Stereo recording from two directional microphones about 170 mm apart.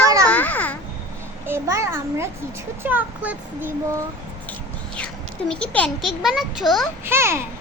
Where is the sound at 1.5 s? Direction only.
15° right (ahead or behind).